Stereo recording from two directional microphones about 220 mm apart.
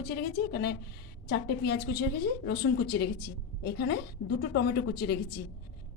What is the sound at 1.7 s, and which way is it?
Speech, 90° left.